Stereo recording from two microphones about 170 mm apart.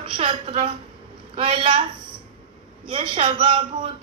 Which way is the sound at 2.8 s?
30° right (ahead or behind).